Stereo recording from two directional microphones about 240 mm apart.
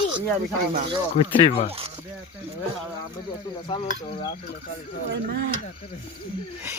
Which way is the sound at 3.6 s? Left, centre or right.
Left.